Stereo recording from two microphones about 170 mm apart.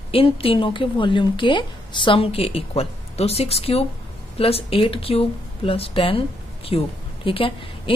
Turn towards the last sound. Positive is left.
turn(degrees=30)  # may be behind; listen again after turning